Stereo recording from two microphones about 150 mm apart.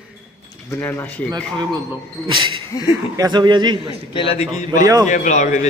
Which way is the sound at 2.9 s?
25° right (ahead or behind).